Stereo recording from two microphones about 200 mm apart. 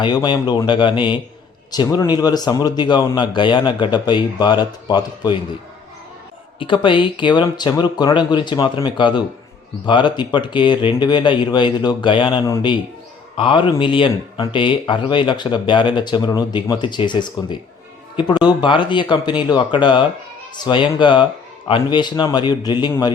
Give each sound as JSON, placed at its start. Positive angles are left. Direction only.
{"t": 0.0, "sound": "speech", "side_deg": 20}
{"t": 6.6, "sound": "speech", "side_deg": 25}